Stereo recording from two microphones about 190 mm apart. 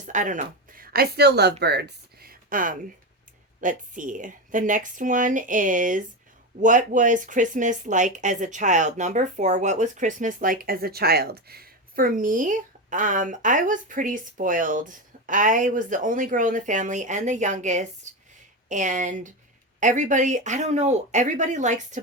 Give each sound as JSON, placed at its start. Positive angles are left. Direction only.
{"t": 0.0, "sound": "speech", "side_deg": -40}